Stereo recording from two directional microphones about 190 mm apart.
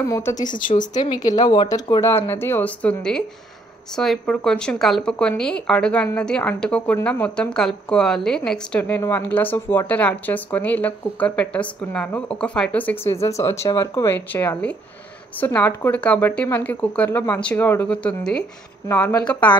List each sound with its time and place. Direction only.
0.1 s a woman's voice: 15° left (ahead or behind)
0.6 s speech: 45° left (ahead or behind)
0.9 s a woman's voice: 20° left (ahead or behind)